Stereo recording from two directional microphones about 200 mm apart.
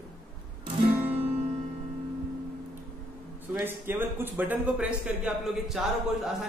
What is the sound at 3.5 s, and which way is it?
A man's voice, 10° right (ahead or behind).